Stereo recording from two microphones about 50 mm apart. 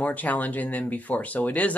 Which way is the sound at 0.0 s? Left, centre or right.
Left.